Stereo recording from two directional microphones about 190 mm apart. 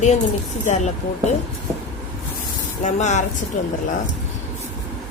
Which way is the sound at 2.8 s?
40° left (ahead or behind).